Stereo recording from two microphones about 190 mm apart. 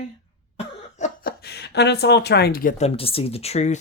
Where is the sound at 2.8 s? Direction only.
30° left (ahead or behind).